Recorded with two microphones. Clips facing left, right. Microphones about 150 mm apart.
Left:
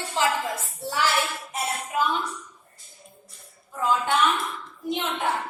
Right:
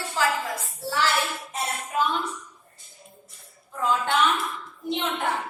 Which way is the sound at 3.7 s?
Centre (ahead or behind).